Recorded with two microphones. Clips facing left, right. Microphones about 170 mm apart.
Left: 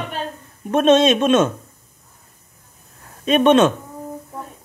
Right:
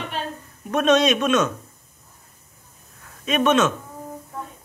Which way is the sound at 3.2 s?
30° left (ahead or behind).